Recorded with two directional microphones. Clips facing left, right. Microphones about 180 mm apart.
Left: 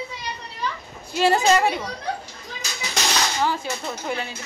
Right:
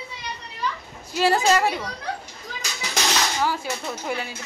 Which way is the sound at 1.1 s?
5° right (ahead or behind).